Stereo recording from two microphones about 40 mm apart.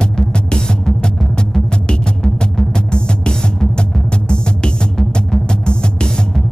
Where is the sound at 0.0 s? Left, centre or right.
Left.